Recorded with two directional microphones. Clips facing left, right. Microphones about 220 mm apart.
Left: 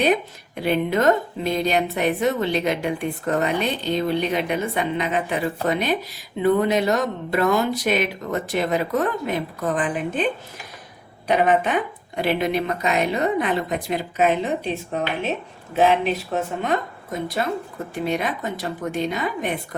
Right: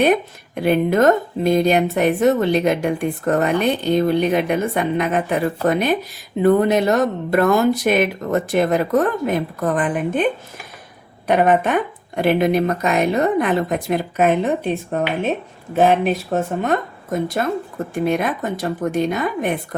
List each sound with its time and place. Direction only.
0.0 s speech: 50° right (ahead or behind)
11.3 s speech: 50° right (ahead or behind)